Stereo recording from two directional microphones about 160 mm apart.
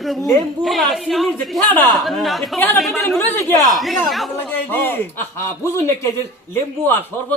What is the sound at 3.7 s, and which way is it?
Speech, centre (ahead or behind).